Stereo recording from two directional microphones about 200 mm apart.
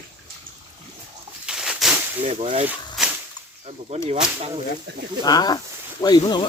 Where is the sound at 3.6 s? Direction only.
30° right (ahead or behind).